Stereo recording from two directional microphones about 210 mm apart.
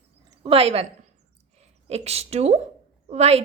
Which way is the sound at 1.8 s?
30° right (ahead or behind).